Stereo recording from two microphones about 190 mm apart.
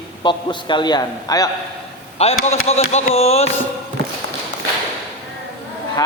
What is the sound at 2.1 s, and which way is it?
Speech, 35° left (ahead or behind).